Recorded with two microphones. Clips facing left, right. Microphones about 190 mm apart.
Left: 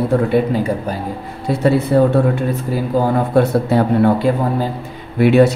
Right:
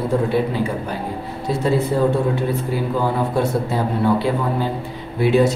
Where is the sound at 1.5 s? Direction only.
65° left (ahead or behind).